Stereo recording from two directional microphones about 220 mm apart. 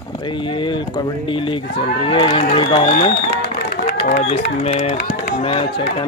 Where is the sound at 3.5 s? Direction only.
40° left (ahead or behind).